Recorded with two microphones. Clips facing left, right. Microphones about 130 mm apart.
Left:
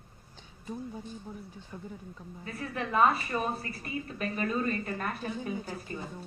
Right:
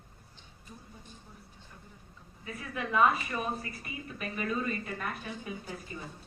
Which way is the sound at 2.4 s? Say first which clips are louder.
Left 2 dB; 35° left (ahead or behind).